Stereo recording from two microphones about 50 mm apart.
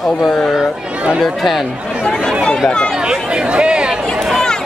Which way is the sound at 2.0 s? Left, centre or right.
Centre.